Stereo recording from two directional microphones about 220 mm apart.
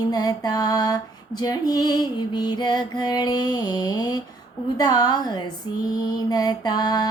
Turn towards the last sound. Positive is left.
turn(degrees=20)  # may be behind; listen again after turning